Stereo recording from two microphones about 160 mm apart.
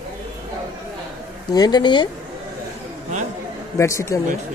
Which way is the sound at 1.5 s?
25° left (ahead or behind).